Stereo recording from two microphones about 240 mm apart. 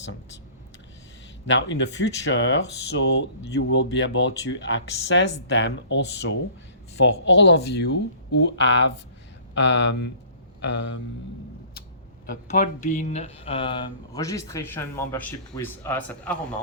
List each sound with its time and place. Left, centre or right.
1.5 s speech: left
7.3 s speech: left
12.2 s speech: left; by 16.6 s centre